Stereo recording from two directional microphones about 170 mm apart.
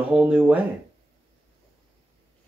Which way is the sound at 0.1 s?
10° right (ahead or behind).